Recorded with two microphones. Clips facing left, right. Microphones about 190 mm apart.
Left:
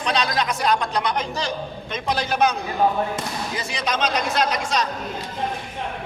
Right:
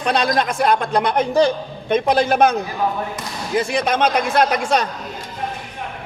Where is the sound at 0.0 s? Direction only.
55° right (ahead or behind).